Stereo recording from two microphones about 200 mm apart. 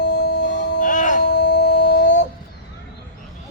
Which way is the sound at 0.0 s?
55° left (ahead or behind).